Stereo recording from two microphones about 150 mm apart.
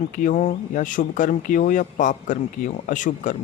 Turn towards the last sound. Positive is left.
turn(degrees=60)  # may be behind; listen again after turning